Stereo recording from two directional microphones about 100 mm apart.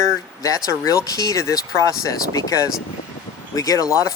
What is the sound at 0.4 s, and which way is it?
Speech, 35° left (ahead or behind).